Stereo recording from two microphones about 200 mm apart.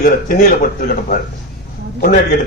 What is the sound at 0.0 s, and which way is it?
A man's voice, 45° left (ahead or behind).